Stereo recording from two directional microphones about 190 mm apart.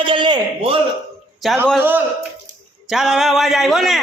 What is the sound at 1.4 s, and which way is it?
A man's voice, centre (ahead or behind).